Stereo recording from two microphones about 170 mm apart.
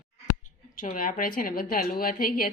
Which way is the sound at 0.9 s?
55° left (ahead or behind).